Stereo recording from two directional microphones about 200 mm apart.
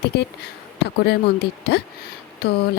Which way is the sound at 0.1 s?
55° left (ahead or behind).